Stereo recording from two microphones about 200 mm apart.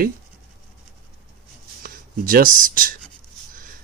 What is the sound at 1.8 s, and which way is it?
Speech, 45° right (ahead or behind).